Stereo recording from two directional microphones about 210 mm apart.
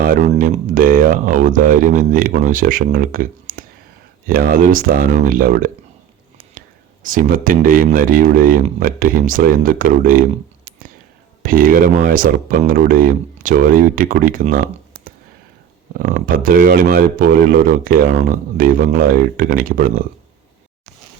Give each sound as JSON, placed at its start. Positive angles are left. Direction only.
{"t": 0.0, "sound": "a man's voice", "side_deg": -40}
{"t": 7.0, "sound": "speech", "side_deg": -40}
{"t": 16.0, "sound": "a man's voice", "side_deg": -40}